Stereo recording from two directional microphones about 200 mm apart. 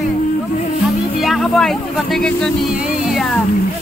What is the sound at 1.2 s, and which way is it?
Speech, centre (ahead or behind).